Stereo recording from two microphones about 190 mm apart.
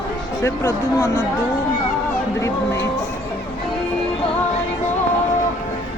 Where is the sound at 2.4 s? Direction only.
15° left (ahead or behind).